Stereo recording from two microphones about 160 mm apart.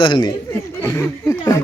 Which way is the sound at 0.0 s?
30° left (ahead or behind).